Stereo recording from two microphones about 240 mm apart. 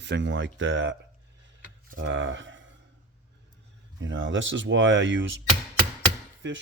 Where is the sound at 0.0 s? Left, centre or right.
Right.